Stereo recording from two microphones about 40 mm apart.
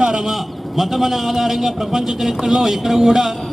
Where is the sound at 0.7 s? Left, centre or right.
Centre.